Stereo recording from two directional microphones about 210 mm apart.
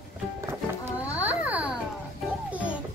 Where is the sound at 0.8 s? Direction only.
10° right (ahead or behind).